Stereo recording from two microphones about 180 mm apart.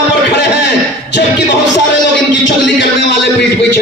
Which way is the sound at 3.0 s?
70° left (ahead or behind).